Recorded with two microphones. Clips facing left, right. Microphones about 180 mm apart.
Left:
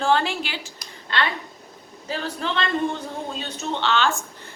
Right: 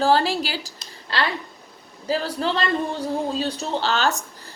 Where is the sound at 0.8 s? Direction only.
35° right (ahead or behind).